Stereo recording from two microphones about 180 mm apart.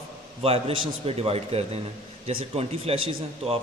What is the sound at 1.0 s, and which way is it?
Speech, 35° right (ahead or behind).